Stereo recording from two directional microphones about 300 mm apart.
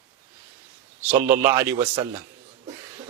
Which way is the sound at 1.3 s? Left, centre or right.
Centre.